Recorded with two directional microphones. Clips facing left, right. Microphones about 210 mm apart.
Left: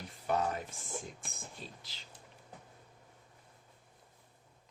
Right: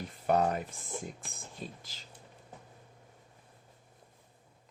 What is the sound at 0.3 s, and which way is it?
Speech, 55° right (ahead or behind).